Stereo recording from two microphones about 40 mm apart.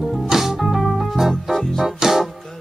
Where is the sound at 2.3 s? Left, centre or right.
Centre.